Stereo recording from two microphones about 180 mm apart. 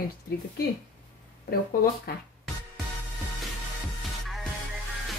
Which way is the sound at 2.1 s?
60° left (ahead or behind).